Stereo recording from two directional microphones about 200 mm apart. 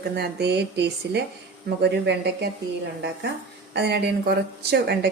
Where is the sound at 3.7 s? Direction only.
55° right (ahead or behind).